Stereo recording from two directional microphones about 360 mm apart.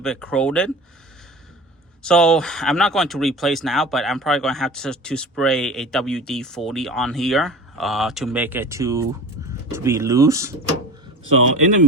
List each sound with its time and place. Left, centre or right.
0.0 s speech: centre
2.0 s speech: centre
11.4 s a man's voice: right